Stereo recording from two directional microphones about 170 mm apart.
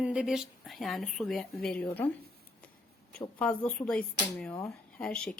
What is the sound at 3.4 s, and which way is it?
Speech, 10° left (ahead or behind).